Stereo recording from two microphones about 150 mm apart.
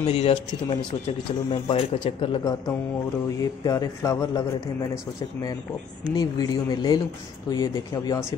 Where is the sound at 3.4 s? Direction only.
20° left (ahead or behind).